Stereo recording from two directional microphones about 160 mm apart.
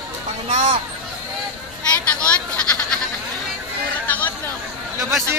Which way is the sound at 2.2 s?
5° left (ahead or behind).